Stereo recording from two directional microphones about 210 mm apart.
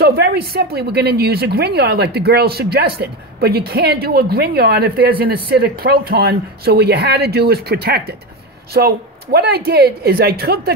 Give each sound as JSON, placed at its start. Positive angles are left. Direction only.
{"t": 0.0, "sound": "speech", "side_deg": -50}